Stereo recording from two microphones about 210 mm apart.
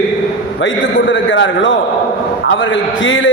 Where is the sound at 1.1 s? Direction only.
60° left (ahead or behind).